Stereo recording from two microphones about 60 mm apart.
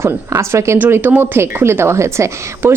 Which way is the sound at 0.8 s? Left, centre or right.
Right.